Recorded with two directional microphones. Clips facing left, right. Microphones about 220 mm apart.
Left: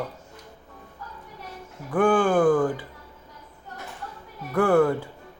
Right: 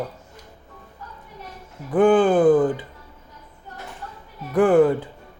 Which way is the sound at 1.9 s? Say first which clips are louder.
Right 5 dB; 20° right (ahead or behind).